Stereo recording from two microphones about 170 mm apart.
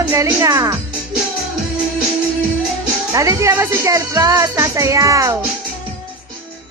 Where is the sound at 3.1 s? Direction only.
20° right (ahead or behind).